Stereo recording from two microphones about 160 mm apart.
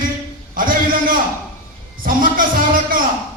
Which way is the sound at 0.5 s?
60° right (ahead or behind).